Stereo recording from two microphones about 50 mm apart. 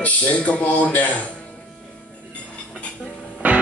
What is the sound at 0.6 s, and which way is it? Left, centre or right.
Speech, left.